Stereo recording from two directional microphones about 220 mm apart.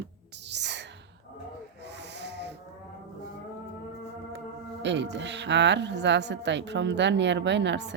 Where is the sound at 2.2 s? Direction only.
50° right (ahead or behind).